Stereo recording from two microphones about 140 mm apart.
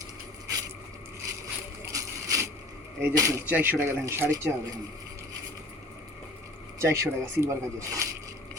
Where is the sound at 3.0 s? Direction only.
20° right (ahead or behind).